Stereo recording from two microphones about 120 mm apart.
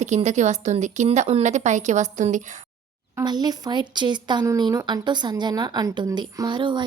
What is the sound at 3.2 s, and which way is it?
A woman's voice, 35° right (ahead or behind).